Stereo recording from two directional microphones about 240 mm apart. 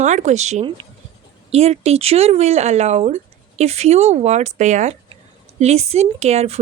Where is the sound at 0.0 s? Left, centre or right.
Right.